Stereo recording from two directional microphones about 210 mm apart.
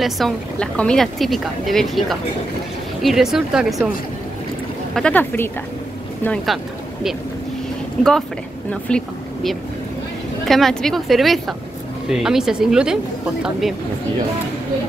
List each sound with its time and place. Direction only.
0.0 s speech: 5° left (ahead or behind)
4.9 s speech: 5° left (ahead or behind)